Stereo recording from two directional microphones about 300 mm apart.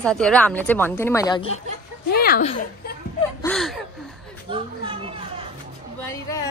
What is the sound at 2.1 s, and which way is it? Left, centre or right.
Speech, left.